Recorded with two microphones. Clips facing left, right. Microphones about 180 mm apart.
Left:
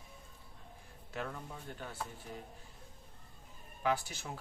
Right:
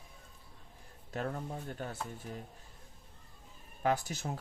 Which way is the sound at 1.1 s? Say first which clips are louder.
Right 5 dB; 45° right (ahead or behind).